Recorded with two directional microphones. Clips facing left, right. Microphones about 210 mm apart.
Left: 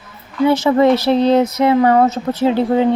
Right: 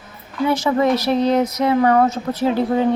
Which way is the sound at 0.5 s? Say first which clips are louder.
Left 4 dB; 25° left (ahead or behind).